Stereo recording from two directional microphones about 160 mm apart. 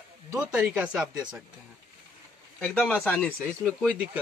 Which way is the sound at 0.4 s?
5° right (ahead or behind).